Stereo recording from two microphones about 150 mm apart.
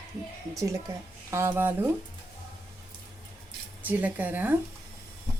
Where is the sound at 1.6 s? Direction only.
15° right (ahead or behind).